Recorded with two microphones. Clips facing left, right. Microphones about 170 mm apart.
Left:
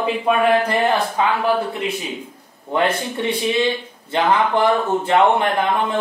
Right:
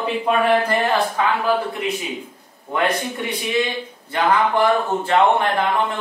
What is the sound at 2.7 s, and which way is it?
Speech, 25° left (ahead or behind).